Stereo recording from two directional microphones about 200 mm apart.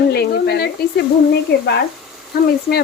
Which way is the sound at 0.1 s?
55° left (ahead or behind).